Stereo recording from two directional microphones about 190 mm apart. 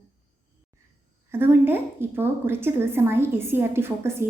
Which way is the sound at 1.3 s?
10° right (ahead or behind).